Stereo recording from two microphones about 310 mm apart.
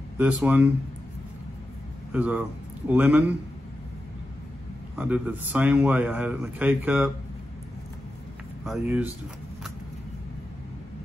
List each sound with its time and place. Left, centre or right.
0.2 s a man's voice: centre
2.1 s a man's voice: centre
4.9 s a man's voice: centre
8.6 s a man's voice: centre